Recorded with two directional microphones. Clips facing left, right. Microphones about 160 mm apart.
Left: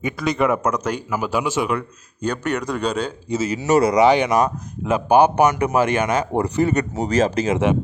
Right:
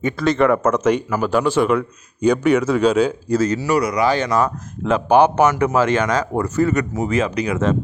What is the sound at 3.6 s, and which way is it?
A man's voice, 25° left (ahead or behind).